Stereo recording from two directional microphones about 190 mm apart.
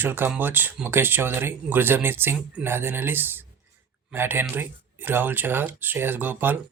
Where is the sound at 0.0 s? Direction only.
10° right (ahead or behind).